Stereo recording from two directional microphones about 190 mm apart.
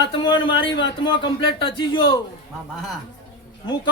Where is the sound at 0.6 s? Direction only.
70° left (ahead or behind).